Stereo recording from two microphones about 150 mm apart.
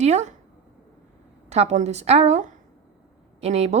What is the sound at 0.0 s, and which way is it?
Speech, 50° right (ahead or behind).